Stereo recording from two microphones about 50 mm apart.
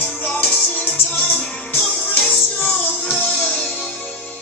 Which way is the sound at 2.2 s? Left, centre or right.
Left.